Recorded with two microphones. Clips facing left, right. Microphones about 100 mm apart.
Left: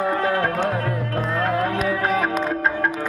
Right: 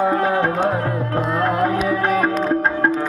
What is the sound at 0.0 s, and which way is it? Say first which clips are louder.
Music: right 3 dB; 25° right (ahead or behind).